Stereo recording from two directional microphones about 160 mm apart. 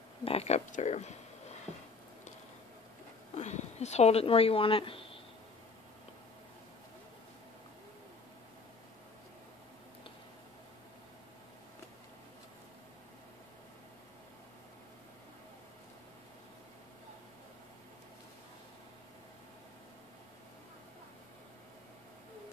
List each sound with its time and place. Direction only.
0.2 s speech: 40° left (ahead or behind)
3.3 s speech: 45° left (ahead or behind)